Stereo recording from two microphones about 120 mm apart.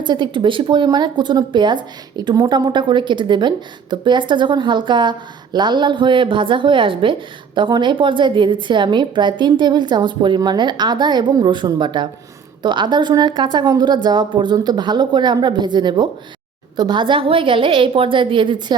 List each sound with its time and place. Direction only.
0.0 s a woman's voice: 40° right (ahead or behind)